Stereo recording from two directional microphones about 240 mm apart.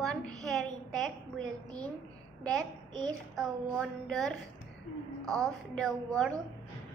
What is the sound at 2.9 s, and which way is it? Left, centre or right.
Child singing, centre.